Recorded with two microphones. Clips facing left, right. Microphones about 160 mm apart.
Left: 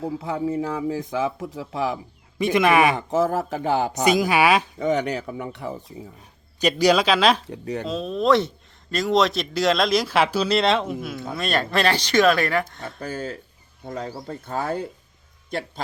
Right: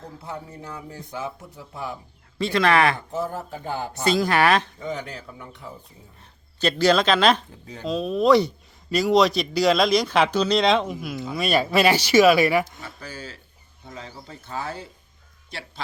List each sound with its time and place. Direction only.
0.2 s a man's voice: 90° left
2.4 s speech: 15° left (ahead or behind)
2.9 s a man's voice: 90° left
4.0 s speech: 15° left (ahead or behind)
4.8 s speech: 75° left (ahead or behind)
6.6 s speech: 15° left (ahead or behind)
7.4 s speech: 75° left (ahead or behind)
7.9 s a man's voice: centre (ahead or behind)
13.0 s speech: 50° left (ahead or behind)